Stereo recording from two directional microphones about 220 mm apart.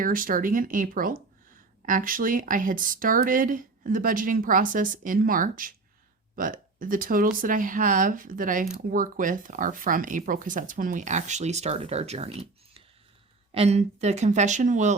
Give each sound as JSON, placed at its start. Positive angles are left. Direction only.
{"t": 0.0, "sound": "speech", "side_deg": -40}